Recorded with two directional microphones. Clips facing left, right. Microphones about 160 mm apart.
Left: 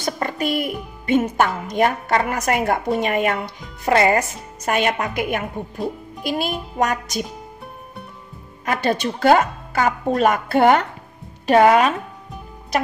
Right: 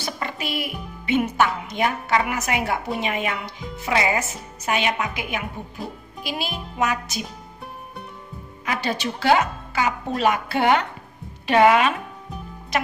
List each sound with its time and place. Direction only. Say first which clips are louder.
0.0 s music: left 6 dB; 50° left (ahead or behind)
1.6 s speech: left 5 dB; 45° left (ahead or behind)
8.6 s speech: left 5 dB; 50° left (ahead or behind)